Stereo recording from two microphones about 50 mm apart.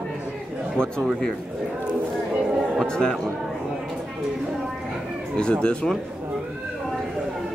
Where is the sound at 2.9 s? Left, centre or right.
Centre.